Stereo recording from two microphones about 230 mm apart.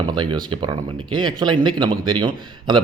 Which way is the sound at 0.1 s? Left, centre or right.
Centre.